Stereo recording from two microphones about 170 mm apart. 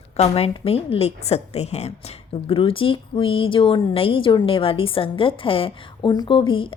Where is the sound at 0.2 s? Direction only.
35° left (ahead or behind).